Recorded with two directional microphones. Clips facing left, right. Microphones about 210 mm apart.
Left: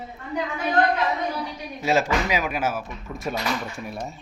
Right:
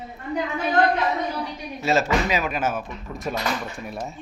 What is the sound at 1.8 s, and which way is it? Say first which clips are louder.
Speech: right 1 dB; 10° left (ahead or behind).